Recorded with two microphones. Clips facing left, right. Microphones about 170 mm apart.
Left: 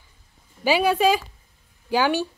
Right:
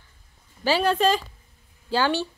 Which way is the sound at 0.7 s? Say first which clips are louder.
Left 2 dB; 10° left (ahead or behind).